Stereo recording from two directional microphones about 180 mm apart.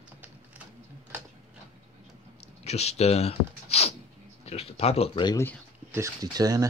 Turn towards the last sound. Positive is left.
turn(degrees=-20)  # may be behind; listen again after turning